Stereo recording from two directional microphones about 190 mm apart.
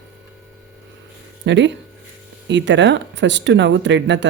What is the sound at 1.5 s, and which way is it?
Speech, 70° right (ahead or behind).